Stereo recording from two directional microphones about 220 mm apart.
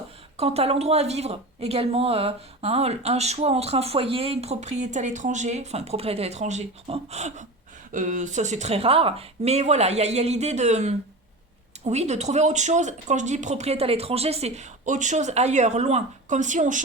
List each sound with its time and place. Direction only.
0.3 s speech: 25° right (ahead or behind)